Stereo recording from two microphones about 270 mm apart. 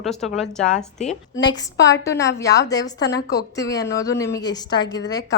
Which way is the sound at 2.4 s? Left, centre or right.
Left.